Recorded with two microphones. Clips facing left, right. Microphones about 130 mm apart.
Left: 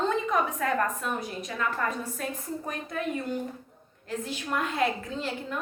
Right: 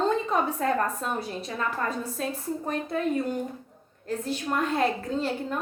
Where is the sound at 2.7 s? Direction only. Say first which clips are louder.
Right 6 dB; 30° right (ahead or behind).